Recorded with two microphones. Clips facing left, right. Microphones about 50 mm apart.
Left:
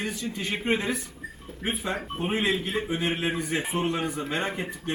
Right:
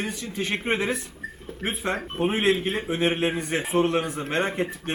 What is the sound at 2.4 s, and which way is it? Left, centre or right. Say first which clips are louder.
Speech: right 3 dB; right.